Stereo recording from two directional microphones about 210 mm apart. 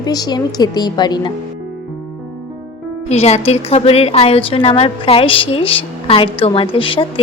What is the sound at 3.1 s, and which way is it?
A woman's voice, 30° left (ahead or behind).